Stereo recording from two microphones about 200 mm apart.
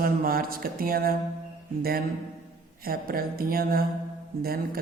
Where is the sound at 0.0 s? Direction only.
45° right (ahead or behind).